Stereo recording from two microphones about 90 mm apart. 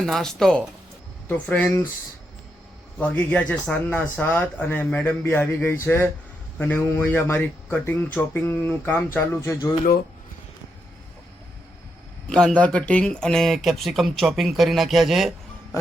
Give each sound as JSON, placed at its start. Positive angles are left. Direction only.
{"t": 0.0, "sound": "speech", "side_deg": 5}
{"t": 1.3, "sound": "speech", "side_deg": 15}
{"t": 3.0, "sound": "speech", "side_deg": 15}
{"t": 12.3, "sound": "speech", "side_deg": 5}